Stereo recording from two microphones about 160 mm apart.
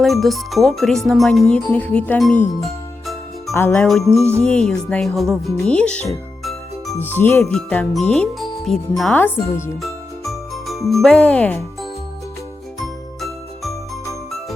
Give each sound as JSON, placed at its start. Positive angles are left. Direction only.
{"t": 0.0, "sound": "speech", "side_deg": 0}
{"t": 3.5, "sound": "speech", "side_deg": 15}
{"t": 3.8, "sound": "speech", "side_deg": 0}
{"t": 6.4, "sound": "music", "side_deg": 0}
{"t": 7.0, "sound": "speech", "side_deg": 10}
{"t": 9.8, "sound": "jingle bell", "side_deg": 0}
{"t": 12.8, "sound": "jingle", "side_deg": 0}